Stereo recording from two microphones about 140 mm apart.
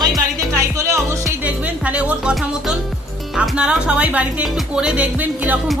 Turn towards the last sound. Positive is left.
turn(degrees=-10)  # may be behind; listen again after turning